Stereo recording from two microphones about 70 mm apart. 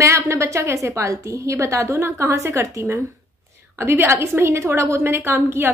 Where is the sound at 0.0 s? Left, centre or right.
Right.